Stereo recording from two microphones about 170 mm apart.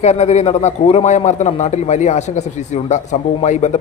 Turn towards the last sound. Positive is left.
turn(degrees=45)  # may be behind; listen again after turning